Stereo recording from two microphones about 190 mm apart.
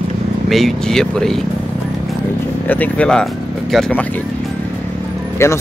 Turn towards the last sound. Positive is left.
turn(degrees=15)  # may be behind; listen again after turning